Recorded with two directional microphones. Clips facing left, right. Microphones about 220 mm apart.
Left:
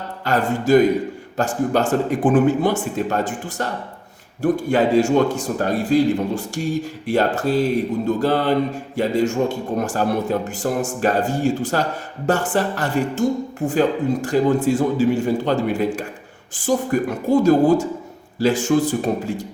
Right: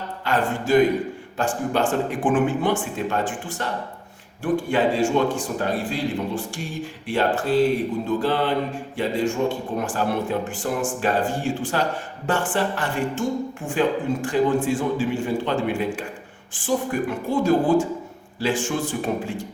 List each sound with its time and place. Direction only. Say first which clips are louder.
0.3 s a man's voice: left 4 dB; 40° left (ahead or behind)